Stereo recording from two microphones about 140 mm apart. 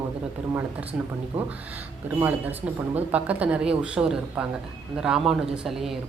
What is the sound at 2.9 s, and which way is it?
Speech, 10° right (ahead or behind).